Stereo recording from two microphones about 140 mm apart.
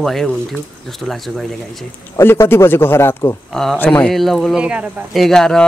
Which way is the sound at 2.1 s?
20° left (ahead or behind).